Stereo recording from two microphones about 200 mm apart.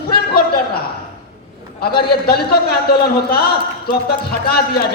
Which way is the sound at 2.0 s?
50° left (ahead or behind).